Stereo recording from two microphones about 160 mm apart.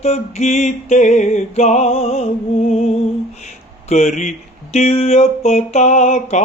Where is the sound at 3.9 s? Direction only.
45° left (ahead or behind).